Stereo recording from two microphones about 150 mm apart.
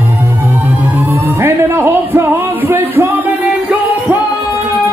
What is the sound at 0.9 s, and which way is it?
Music, 15° right (ahead or behind).